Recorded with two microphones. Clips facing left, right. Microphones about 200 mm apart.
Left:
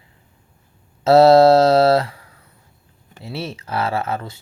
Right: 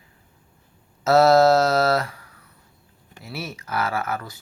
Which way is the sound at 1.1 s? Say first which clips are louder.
Left 5 dB; 30° left (ahead or behind).